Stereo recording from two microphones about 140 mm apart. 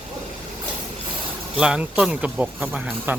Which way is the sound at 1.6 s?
10° right (ahead or behind).